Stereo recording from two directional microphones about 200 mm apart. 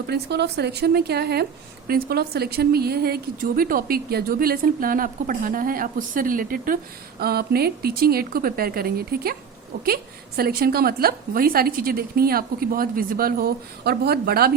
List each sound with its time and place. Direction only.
0.1 s a woman's voice: 55° right (ahead or behind)